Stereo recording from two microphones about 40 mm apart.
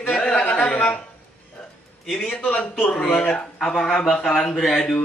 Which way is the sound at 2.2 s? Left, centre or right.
Left.